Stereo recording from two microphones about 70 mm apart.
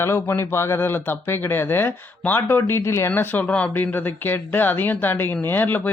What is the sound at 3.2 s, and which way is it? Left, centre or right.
Speech, left.